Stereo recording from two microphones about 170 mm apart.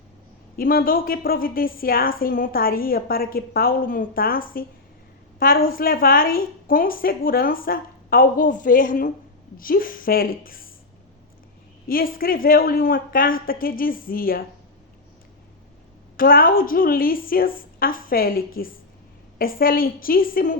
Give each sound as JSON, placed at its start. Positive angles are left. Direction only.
{"t": 0.5, "sound": "a woman's voice", "side_deg": 60}
{"t": 11.9, "sound": "a woman's voice", "side_deg": 60}
{"t": 16.1, "sound": "a woman's voice", "side_deg": 55}